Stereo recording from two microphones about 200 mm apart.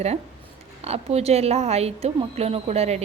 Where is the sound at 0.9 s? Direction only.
30° right (ahead or behind).